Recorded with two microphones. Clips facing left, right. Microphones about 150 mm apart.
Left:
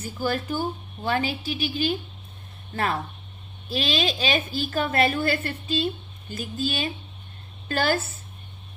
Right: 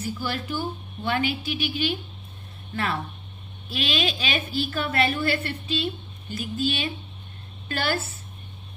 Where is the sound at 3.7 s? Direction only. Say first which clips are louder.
Left 2 dB; 40° left (ahead or behind).